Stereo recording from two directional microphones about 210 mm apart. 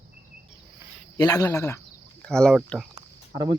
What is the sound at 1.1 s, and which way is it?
Speech, 20° left (ahead or behind).